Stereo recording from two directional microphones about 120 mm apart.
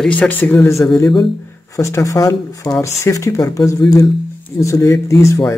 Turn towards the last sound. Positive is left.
turn(degrees=25)  # may be behind; listen again after turning